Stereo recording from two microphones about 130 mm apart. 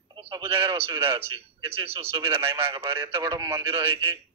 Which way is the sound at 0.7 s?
40° right (ahead or behind).